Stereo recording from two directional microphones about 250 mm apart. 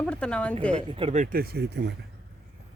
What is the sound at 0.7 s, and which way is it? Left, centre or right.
Speech, right.